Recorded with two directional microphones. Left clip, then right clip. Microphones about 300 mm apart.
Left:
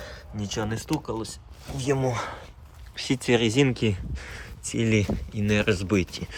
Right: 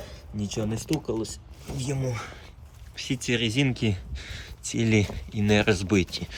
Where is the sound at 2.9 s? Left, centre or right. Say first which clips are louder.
Left 4 dB; centre.